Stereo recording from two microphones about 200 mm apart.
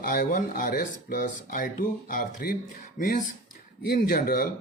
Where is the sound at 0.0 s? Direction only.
45° left (ahead or behind).